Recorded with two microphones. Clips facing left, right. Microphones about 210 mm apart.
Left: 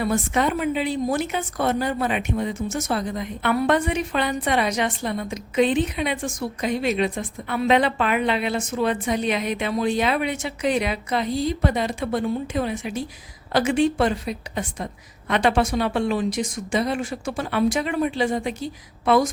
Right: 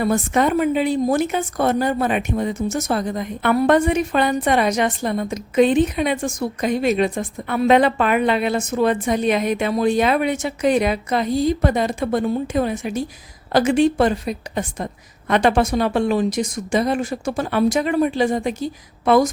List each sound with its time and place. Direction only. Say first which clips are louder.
0.0 s a woman's voice: right 4 dB; 45° right (ahead or behind)